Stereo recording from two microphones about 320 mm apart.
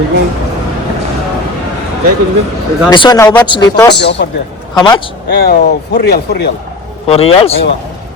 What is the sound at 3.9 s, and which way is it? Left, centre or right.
Speech, left.